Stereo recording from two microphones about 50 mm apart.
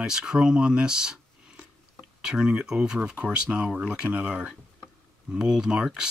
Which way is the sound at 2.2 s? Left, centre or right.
Centre.